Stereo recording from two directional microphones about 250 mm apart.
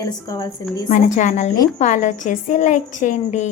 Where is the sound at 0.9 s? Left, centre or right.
Left.